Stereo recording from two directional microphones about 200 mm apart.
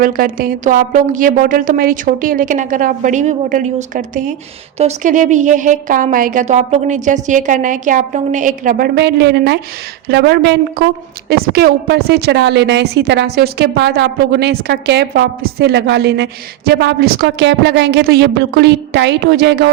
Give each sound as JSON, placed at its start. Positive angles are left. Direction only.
{"t": 0.0, "sound": "a woman's voice", "side_deg": -45}